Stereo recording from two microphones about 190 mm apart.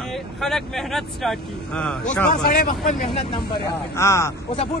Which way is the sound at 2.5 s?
45° left (ahead or behind).